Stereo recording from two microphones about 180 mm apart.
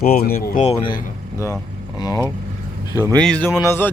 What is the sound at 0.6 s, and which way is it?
Speech, 35° left (ahead or behind).